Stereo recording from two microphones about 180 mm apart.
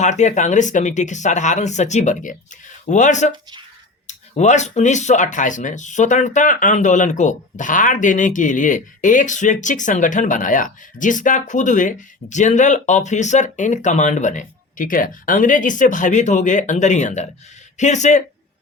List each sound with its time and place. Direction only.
0.0 s speech: 40° left (ahead or behind)